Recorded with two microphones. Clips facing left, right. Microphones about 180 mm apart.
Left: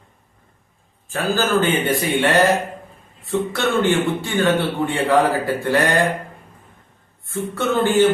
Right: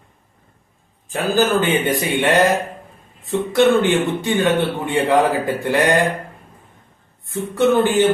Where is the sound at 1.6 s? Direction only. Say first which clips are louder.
Right 1 dB; 15° right (ahead or behind).